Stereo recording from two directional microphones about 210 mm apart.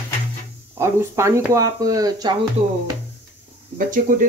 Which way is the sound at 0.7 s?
15° right (ahead or behind).